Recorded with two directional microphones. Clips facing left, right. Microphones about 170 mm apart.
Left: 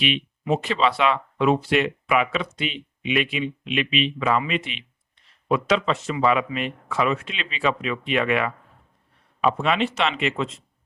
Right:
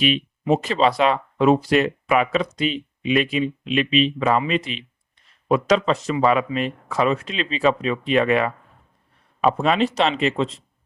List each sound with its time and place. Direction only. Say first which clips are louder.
0.0 s speech: right 4 dB; 40° right (ahead or behind)